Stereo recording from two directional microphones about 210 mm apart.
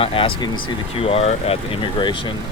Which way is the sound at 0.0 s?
25° left (ahead or behind).